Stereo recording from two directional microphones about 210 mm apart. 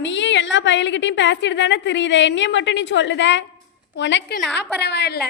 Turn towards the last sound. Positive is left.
turn(degrees=50)  # may be behind; listen again after turning